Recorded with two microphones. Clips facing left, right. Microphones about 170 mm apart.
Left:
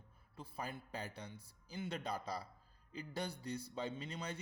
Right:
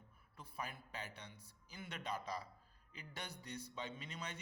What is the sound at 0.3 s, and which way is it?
Speech, 30° left (ahead or behind).